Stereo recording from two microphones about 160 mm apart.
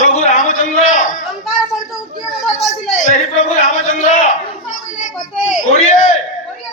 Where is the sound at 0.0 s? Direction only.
55° left (ahead or behind).